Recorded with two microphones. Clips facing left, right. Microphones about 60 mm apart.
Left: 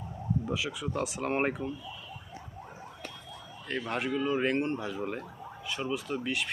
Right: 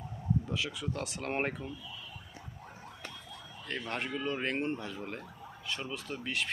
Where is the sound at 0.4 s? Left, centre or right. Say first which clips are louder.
Left 3 dB; centre.